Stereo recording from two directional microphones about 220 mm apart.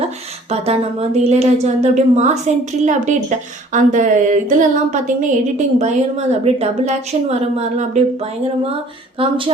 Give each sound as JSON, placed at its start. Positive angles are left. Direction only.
{"t": 0.5, "sound": "a woman's voice", "side_deg": -30}